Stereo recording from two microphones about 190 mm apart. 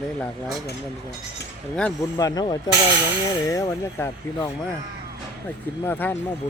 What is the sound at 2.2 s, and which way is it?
Speech, 20° left (ahead or behind).